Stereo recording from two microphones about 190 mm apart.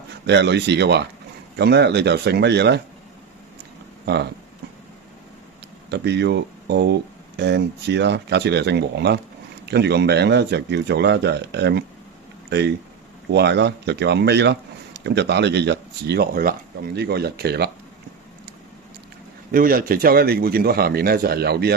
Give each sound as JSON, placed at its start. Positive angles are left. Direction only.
{"t": 0.3, "sound": "speech", "side_deg": -65}
{"t": 4.0, "sound": "speech", "side_deg": -60}
{"t": 5.9, "sound": "speech", "side_deg": -65}
{"t": 19.5, "sound": "a man's voice", "side_deg": -50}